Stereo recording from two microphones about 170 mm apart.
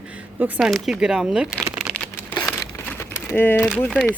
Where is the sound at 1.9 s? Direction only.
5° left (ahead or behind).